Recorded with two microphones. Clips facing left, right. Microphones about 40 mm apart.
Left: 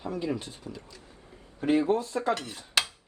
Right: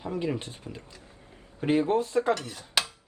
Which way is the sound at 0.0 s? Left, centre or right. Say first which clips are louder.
Right 1 dB; right.